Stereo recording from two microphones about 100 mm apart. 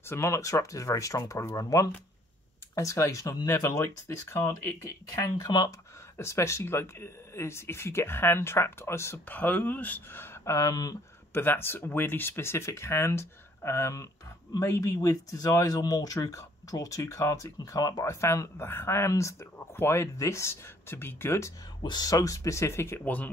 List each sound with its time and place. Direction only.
0.1 s speech: 30° left (ahead or behind)
5.4 s speech: 45° left (ahead or behind)
6.1 s speech: 30° left (ahead or behind)
11.3 s speech: 25° left (ahead or behind)
21.8 s speech: 45° left (ahead or behind); by 23.3 s 15° left (ahead or behind)